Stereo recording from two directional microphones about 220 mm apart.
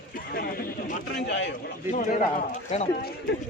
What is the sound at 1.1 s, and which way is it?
Speech, 50° left (ahead or behind).